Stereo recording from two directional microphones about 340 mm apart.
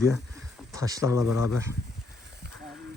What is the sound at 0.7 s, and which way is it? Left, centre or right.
Speech, centre.